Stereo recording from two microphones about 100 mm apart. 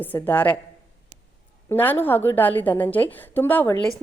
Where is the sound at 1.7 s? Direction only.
20° left (ahead or behind).